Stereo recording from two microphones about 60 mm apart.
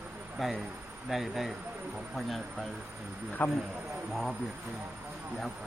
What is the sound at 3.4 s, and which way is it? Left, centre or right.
Speech, left.